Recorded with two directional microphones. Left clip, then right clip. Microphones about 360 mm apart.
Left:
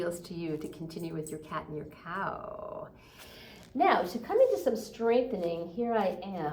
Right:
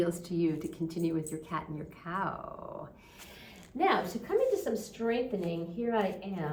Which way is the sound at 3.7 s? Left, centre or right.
Centre.